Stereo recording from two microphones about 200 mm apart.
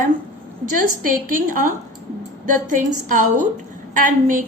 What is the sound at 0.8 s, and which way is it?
A woman's voice, 45° right (ahead or behind).